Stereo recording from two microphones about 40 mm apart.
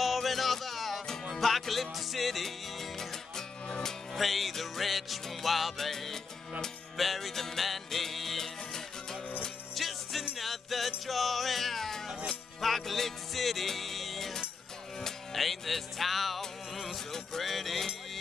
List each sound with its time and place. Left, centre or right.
0.0 s music: centre